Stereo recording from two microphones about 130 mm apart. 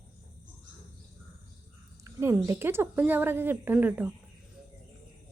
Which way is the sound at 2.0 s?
20° right (ahead or behind).